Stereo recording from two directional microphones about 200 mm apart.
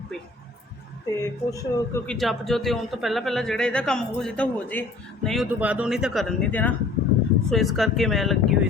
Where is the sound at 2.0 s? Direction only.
5° left (ahead or behind).